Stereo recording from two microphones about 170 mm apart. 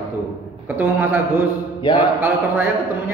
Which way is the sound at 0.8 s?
10° right (ahead or behind).